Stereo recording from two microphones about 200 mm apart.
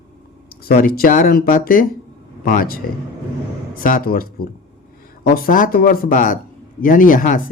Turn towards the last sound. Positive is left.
turn(degrees=40)  # may be behind; listen again after turning